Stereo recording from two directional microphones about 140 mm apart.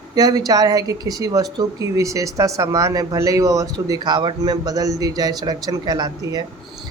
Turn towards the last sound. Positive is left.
turn(degrees=-25)  # may be behind; listen again after turning